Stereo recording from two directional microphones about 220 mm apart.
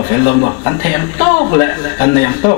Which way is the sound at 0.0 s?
25° left (ahead or behind).